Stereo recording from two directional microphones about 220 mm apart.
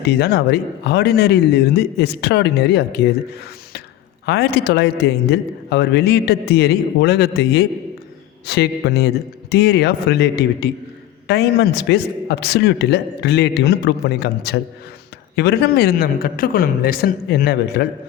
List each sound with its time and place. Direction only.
0.1 s a man's voice: 45° left (ahead or behind)
4.3 s a man's voice: 50° left (ahead or behind)